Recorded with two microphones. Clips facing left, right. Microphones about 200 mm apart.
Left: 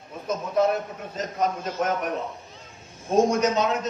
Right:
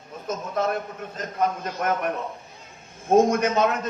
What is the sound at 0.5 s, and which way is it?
Speech, 50° right (ahead or behind).